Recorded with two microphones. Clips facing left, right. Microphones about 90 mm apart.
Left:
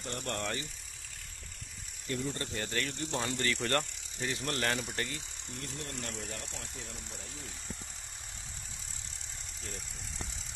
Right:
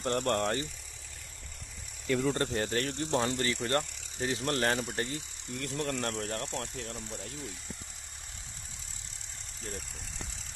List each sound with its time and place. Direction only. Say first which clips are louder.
0.0 s speech: right 8 dB; 55° right (ahead or behind)
2.0 s speech: right 7 dB; 90° right; by 2.5 s 75° right (ahead or behind)
2.5 s speech: right 5 dB; 40° right (ahead or behind)
3.5 s speech: right 1 dB; 10° right (ahead or behind)
4.2 s speech: right 4 dB; 35° right (ahead or behind)
5.6 s speech: right 9 dB; 85° right
6.0 s speech: right 7 dB; 55° right (ahead or behind)